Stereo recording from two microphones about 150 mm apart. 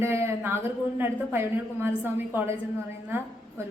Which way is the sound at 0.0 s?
15° right (ahead or behind).